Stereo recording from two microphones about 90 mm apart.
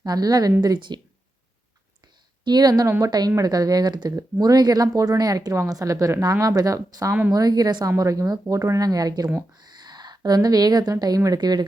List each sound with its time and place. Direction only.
0.0 s a woman's voice: 45° right (ahead or behind)
2.4 s a woman's voice: 50° right (ahead or behind)